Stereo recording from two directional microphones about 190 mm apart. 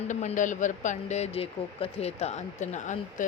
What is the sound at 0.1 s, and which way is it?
Speech, 40° left (ahead or behind).